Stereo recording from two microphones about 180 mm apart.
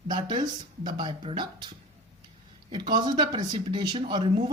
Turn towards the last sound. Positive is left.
turn(degrees=-25)  # may be behind; listen again after turning